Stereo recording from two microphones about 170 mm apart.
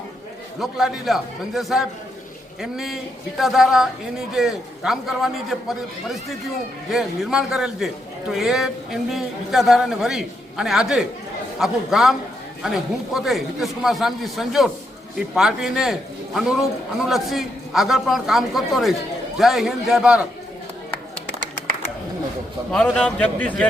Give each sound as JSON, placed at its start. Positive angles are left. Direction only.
{"t": 0.6, "sound": "a man's voice", "side_deg": 0}
{"t": 22.7, "sound": "a man's voice", "side_deg": 5}